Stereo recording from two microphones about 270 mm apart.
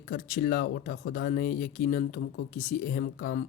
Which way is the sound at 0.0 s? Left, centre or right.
Left.